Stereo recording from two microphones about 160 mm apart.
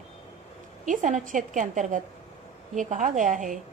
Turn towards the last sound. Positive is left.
turn(degrees=-55)  # may be behind; listen again after turning